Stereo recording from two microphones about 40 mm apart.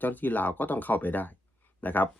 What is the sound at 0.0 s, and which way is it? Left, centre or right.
Speech, left.